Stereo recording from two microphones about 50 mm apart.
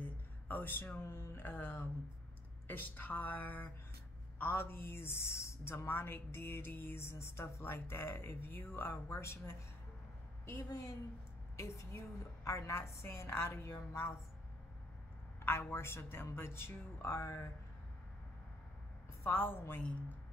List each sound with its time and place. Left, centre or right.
0.0 s a sound: left
1.0 s a woman's voice: left
1.3 s speech: left
7.9 s speech: left
10.4 s a woman's voice: left
11.5 s a woman's voice: left
13.0 s a woman's voice: left
15.7 s speech: left
19.3 s speech: left